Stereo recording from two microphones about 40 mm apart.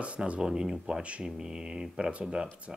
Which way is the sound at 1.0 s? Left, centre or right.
Right.